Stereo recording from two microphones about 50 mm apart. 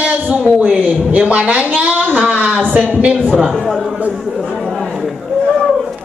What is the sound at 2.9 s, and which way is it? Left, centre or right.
Speech, right.